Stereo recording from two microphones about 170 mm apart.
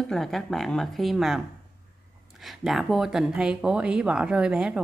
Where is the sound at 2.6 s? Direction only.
Centre (ahead or behind).